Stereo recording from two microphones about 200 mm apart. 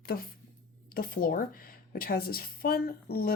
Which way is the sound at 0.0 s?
50° left (ahead or behind).